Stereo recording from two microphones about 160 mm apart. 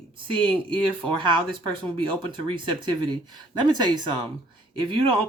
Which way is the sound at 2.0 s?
30° right (ahead or behind).